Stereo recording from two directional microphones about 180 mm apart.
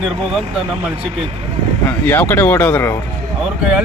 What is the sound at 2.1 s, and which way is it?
Speech, 10° left (ahead or behind).